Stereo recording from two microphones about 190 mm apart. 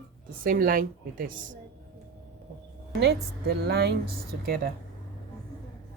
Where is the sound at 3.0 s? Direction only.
60° right (ahead or behind).